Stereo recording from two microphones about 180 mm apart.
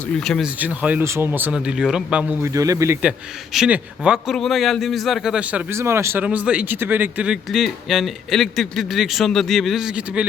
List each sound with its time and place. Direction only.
0.2 s a man's voice: centre (ahead or behind)
2.4 s speech: 20° right (ahead or behind)
3.0 s a man's voice: 5° right (ahead or behind)